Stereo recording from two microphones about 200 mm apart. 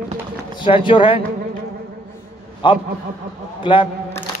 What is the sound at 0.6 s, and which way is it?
Speech, 25° left (ahead or behind).